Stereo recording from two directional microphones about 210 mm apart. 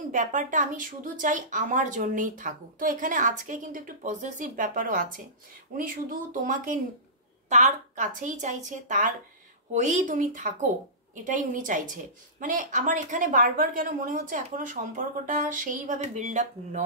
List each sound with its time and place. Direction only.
0.1 s speech: 35° right (ahead or behind)